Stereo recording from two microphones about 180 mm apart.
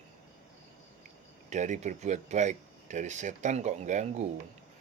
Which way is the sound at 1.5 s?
40° right (ahead or behind).